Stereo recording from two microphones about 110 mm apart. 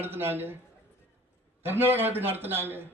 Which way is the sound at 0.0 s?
20° right (ahead or behind).